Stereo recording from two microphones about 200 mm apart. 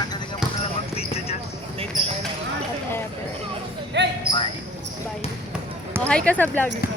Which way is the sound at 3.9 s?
60° right (ahead or behind).